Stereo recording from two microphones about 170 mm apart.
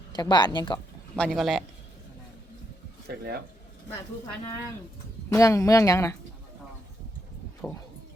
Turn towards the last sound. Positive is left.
turn(degrees=5)  # may be behind; listen again after turning